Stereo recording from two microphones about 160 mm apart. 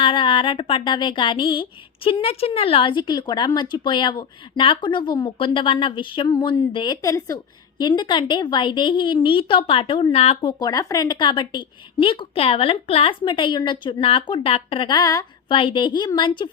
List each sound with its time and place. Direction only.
0.0 s a sound: 30° left (ahead or behind)
2.0 s a woman's voice: 35° left (ahead or behind)
10.6 s speech: 25° left (ahead or behind)
15.5 s a woman's voice: 30° left (ahead or behind)